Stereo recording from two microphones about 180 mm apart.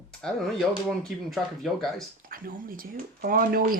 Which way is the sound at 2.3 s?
50° right (ahead or behind).